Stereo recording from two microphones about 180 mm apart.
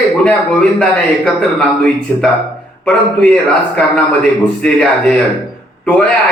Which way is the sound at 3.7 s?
5° left (ahead or behind).